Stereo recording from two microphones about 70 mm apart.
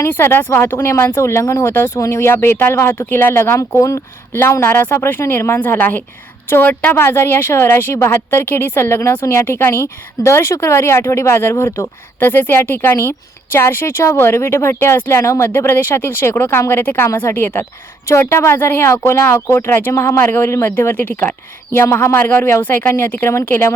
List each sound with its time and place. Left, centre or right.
0.0 s speech: left
3.8 s speech: left
4.3 s a woman's voice: left
21.7 s a woman's voice: left